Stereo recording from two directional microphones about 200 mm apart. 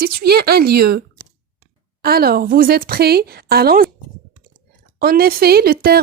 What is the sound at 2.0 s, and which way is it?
Speech, 50° right (ahead or behind).